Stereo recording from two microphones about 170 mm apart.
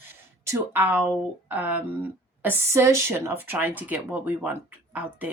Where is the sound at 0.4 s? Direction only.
10° right (ahead or behind).